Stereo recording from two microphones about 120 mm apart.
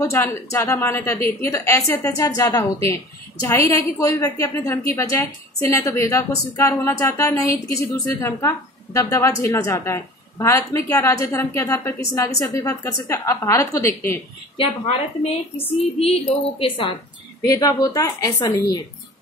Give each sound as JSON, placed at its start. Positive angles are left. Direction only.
{"t": 0.0, "sound": "a woman's voice", "side_deg": 20}
{"t": 14.6, "sound": "a woman's voice", "side_deg": 55}
{"t": 17.5, "sound": "a woman's voice", "side_deg": 30}